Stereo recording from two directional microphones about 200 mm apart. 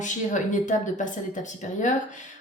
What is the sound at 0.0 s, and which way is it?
A woman's voice, 40° left (ahead or behind).